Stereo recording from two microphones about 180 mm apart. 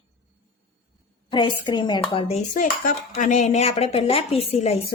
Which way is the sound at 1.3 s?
25° left (ahead or behind).